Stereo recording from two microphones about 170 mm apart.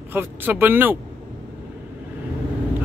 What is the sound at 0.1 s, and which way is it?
Speech, 10° right (ahead or behind).